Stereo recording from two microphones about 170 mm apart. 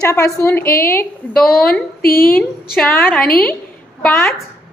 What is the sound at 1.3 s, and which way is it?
Speech, 5° left (ahead or behind).